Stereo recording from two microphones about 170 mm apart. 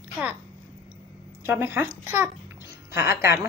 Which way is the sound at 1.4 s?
15° right (ahead or behind).